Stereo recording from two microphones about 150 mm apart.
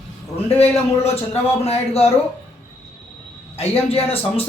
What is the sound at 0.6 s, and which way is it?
Speech, 40° left (ahead or behind).